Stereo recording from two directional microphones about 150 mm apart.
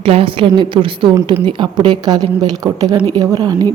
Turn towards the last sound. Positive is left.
turn(degrees=-25)  # may be behind; listen again after turning